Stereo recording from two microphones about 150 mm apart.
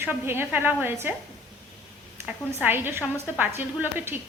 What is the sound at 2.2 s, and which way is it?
A woman's voice, 10° right (ahead or behind).